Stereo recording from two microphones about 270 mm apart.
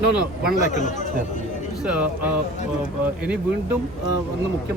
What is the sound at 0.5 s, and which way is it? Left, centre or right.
Speech, left.